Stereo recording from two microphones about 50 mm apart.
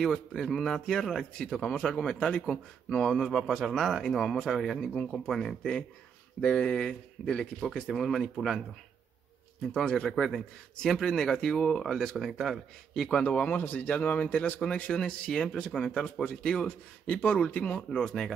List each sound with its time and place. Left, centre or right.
0.0 s speech: centre
6.4 s speech: left
7.9 s speech: centre
9.6 s speech: centre
12.9 s a man's voice: centre
13.2 s speech: left
13.5 s speech: left
14.9 s speech: centre
16.6 s speech: left; by 18.3 s centre